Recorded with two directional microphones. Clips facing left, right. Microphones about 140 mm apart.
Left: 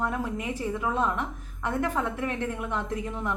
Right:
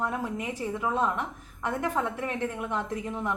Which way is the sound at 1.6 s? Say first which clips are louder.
Left 1 dB; 15° right (ahead or behind).